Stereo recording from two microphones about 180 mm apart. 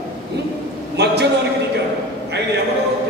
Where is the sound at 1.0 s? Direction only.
70° right (ahead or behind).